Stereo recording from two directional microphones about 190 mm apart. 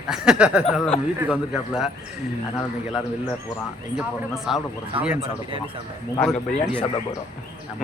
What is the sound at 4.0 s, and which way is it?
Speech, centre (ahead or behind).